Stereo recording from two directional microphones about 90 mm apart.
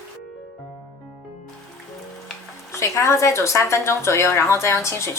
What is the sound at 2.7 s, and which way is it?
A woman's voice, 30° left (ahead or behind).